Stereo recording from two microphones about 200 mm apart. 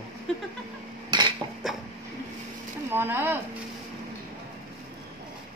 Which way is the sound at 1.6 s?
Centre (ahead or behind).